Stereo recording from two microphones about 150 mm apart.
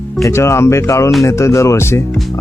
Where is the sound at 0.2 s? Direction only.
20° left (ahead or behind).